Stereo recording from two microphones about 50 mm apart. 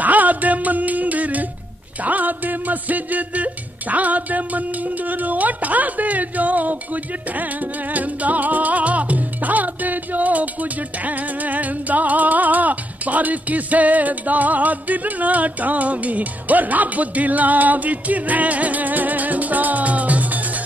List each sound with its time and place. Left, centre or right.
0.0 s music: right
2.0 s a sound: right
7.9 s music: right